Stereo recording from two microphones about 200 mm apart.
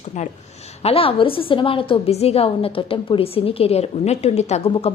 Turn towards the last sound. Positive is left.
turn(degrees=30)  # may be behind; listen again after turning